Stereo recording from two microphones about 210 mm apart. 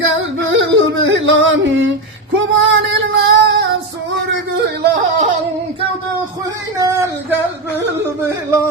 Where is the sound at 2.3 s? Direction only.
60° right (ahead or behind).